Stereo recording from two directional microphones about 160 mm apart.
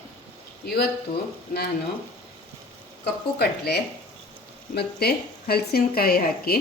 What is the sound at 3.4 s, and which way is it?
A woman's voice, 90° left.